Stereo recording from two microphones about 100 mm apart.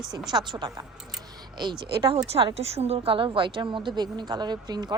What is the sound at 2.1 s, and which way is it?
A woman's voice, 80° right.